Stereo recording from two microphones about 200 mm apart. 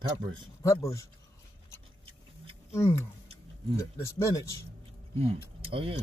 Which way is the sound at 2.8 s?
15° left (ahead or behind).